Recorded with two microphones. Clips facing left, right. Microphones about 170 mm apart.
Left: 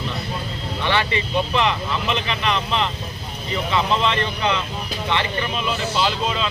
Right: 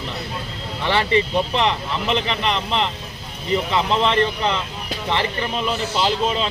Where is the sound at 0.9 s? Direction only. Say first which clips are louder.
Right 4 dB; 30° right (ahead or behind).